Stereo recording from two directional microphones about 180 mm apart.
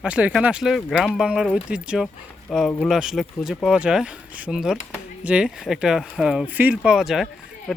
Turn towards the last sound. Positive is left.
turn(degrees=0)  # may be behind; listen again after turning